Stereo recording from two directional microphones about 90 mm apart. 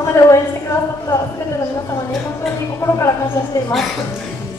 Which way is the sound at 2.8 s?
30° left (ahead or behind).